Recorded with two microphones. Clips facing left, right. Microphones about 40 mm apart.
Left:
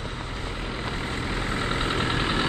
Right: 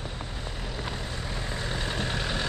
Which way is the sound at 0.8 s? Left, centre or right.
Left.